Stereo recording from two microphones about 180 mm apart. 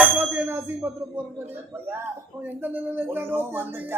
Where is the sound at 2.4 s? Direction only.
10° right (ahead or behind).